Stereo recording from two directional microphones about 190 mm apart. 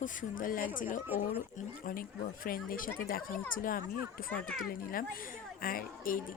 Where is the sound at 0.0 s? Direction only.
45° left (ahead or behind).